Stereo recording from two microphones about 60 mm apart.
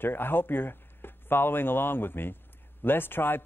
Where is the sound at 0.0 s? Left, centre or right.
Left.